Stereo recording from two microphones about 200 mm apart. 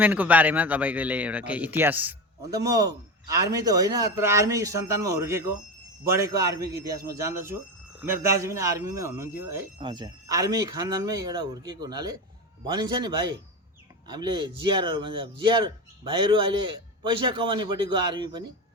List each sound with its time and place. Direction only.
0.0 s speech: 10° right (ahead or behind)
9.7 s a man's voice: 25° right (ahead or behind)